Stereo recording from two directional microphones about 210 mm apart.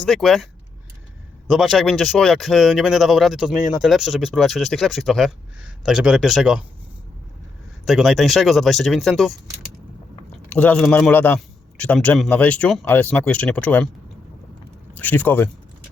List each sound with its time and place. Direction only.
0.0 s speech: centre (ahead or behind)
1.5 s speech: centre (ahead or behind)
7.9 s speech: centre (ahead or behind)
10.5 s speech: 5° left (ahead or behind)
14.9 s speech: 10° left (ahead or behind)